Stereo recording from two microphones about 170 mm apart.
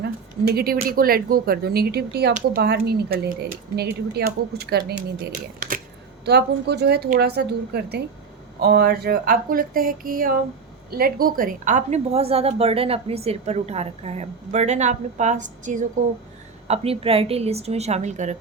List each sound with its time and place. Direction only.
0.0 s a woman's voice: 65° right (ahead or behind)
6.2 s a woman's voice: 75° right (ahead or behind); by 15.9 s 45° right (ahead or behind)
16.6 s a woman's voice: 35° right (ahead or behind)